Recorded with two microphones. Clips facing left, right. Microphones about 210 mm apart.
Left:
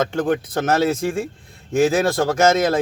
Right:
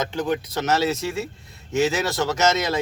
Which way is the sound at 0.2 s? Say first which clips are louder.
Left 4 dB; 50° left (ahead or behind).